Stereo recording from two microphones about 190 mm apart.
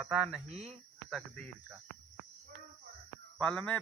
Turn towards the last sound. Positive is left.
turn(degrees=5)  # may be behind; listen again after turning